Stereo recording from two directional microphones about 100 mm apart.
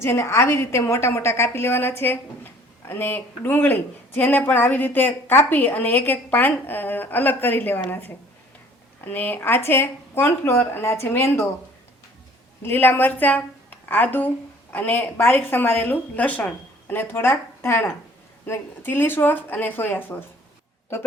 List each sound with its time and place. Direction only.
0.0 s a woman's voice: 25° left (ahead or behind)
12.6 s a woman's voice: 20° left (ahead or behind)